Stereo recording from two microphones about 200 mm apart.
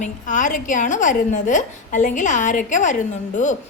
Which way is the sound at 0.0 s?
40° left (ahead or behind).